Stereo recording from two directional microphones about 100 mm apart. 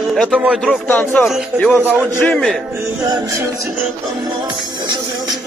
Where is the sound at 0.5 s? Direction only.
Centre (ahead or behind).